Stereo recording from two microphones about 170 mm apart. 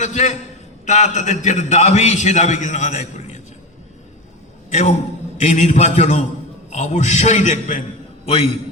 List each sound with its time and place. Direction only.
0.0 s a man's voice: 45° left (ahead or behind)
4.7 s a man's voice: 40° left (ahead or behind)